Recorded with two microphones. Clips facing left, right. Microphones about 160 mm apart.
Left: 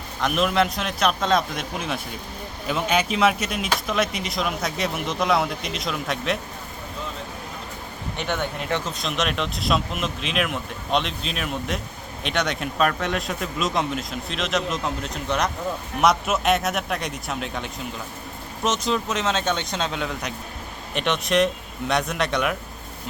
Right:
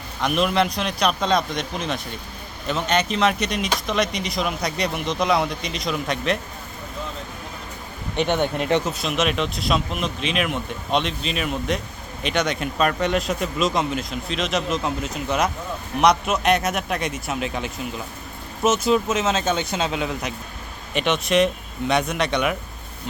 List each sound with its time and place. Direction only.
0.2 s speech: centre (ahead or behind)
8.1 s speech: 20° right (ahead or behind)
8.9 s speech: 5° right (ahead or behind)